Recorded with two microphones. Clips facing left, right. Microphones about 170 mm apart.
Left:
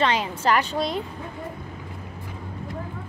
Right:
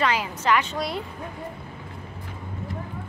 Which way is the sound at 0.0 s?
25° left (ahead or behind).